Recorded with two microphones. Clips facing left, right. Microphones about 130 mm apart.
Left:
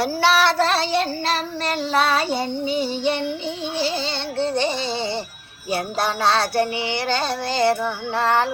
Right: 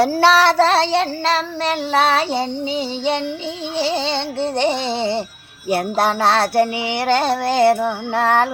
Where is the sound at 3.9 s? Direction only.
90° right.